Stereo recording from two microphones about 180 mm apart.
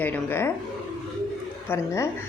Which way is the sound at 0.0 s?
10° left (ahead or behind).